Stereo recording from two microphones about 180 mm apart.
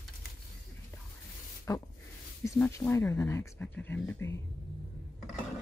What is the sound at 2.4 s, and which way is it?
Speech, 15° left (ahead or behind).